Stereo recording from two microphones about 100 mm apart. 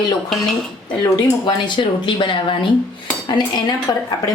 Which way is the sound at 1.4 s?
50° left (ahead or behind).